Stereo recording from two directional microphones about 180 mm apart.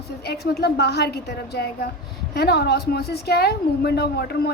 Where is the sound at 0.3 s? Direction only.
60° left (ahead or behind).